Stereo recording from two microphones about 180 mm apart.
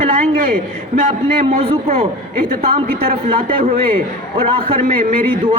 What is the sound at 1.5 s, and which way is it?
Speech, 35° right (ahead or behind).